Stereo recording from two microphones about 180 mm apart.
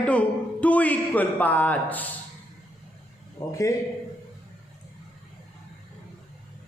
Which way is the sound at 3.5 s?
15° left (ahead or behind).